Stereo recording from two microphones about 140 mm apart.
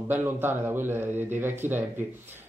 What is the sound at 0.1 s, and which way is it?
Speech, 15° right (ahead or behind).